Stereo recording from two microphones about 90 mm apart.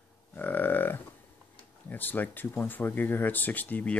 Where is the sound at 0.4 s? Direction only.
20° left (ahead or behind).